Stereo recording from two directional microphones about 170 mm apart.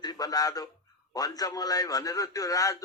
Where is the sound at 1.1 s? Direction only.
20° left (ahead or behind).